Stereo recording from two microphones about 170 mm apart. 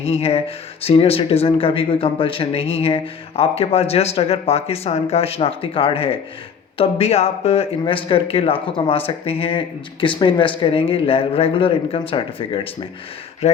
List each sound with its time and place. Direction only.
0.1 s speech: 35° left (ahead or behind)